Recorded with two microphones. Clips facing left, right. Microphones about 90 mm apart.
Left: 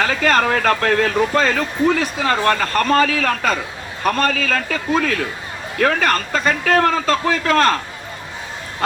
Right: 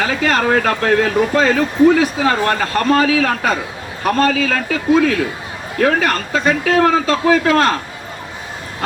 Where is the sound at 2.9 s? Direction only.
45° left (ahead or behind).